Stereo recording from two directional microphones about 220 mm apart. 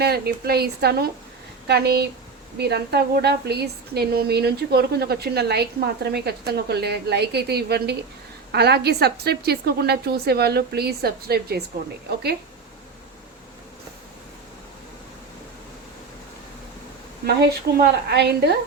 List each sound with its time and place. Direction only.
0.0 s a woman's voice: 45° right (ahead or behind)
17.7 s a woman's voice: 45° right (ahead or behind)